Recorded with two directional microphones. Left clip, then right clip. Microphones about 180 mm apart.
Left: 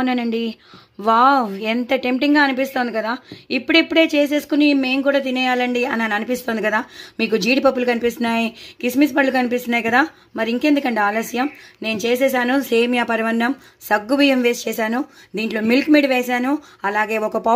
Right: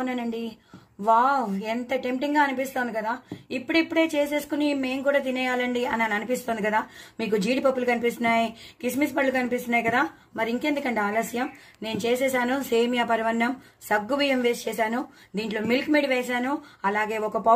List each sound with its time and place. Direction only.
0.0 s a woman's voice: 40° left (ahead or behind)